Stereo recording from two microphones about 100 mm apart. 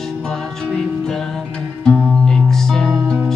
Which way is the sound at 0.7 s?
5° left (ahead or behind).